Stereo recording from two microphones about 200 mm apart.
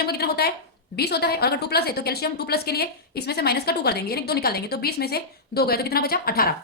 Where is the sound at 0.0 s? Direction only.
50° left (ahead or behind).